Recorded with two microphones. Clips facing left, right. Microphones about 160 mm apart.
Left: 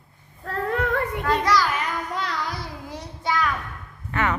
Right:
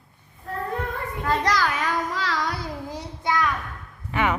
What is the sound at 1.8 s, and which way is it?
Child singing, 90° right.